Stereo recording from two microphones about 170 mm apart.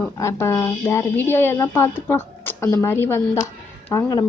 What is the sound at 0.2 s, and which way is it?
A woman's voice, 15° left (ahead or behind).